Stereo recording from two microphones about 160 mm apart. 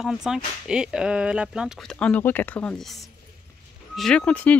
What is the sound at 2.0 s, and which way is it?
Speech, 10° left (ahead or behind).